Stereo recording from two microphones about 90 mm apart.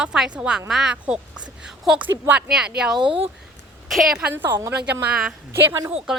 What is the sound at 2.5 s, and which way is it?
Speech, 5° right (ahead or behind).